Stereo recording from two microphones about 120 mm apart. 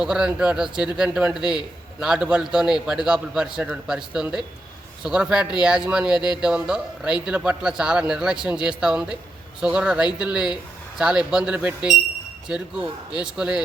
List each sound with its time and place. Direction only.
0.0 s a man's voice: 5° right (ahead or behind)
1.4 s speech: 35° left (ahead or behind)
2.0 s a man's voice: 10° right (ahead or behind)
6.1 s speech: 40° left (ahead or behind)
6.4 s a man's voice: 5° right (ahead or behind)